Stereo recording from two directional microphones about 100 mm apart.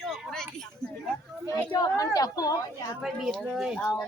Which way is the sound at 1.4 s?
40° left (ahead or behind).